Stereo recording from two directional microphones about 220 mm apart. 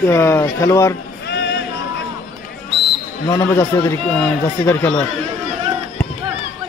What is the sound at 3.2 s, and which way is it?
A man's voice, 15° left (ahead or behind).